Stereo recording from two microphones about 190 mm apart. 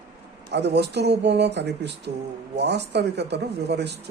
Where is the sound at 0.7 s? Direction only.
60° right (ahead or behind).